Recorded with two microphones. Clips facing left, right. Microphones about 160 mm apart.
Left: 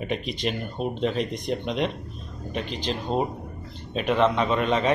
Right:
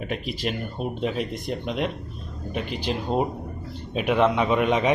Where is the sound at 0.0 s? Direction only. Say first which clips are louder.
Left 1 dB; 5° right (ahead or behind).